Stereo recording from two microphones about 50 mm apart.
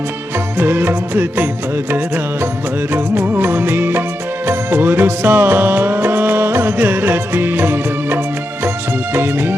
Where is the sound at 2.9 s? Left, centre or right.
Right.